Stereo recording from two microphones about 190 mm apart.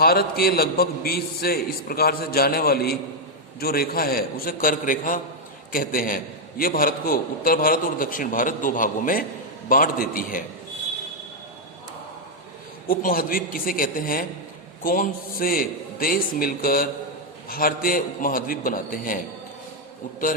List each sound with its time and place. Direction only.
0.0 s a man's voice: 55° left (ahead or behind)
12.9 s a man's voice: 45° left (ahead or behind)